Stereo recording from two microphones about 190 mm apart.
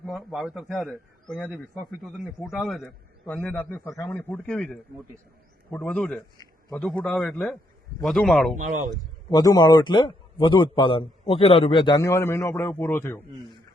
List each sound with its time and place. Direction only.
0.0 s a man's voice: centre (ahead or behind)
8.5 s speech: 40° right (ahead or behind)
9.3 s a man's voice: 20° left (ahead or behind)